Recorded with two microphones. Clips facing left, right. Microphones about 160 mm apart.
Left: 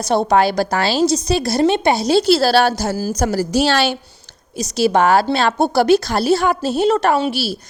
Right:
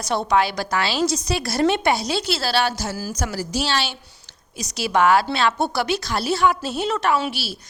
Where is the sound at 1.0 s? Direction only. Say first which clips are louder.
Left 6 dB; 25° left (ahead or behind); by 3.9 s 50° left (ahead or behind).